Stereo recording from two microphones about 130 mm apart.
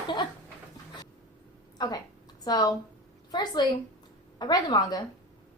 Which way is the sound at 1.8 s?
30° left (ahead or behind).